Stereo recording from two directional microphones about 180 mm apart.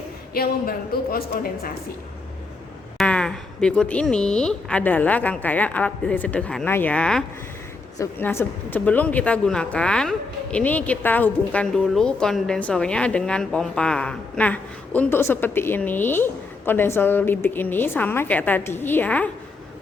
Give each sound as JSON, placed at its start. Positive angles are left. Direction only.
{"t": 0.3, "sound": "a man's voice", "side_deg": 55}
{"t": 3.0, "sound": "speech", "side_deg": 5}